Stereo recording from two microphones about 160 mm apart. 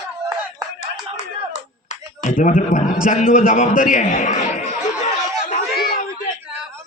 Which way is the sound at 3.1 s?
60° left (ahead or behind).